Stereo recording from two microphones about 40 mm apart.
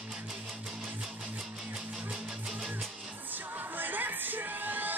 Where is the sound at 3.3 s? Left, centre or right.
Right.